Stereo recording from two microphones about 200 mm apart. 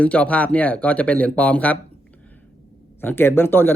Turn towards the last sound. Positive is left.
turn(degrees=10)  # may be behind; listen again after turning